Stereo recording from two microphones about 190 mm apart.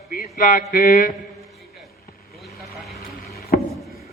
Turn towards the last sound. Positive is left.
turn(degrees=55)  # may be behind; listen again after turning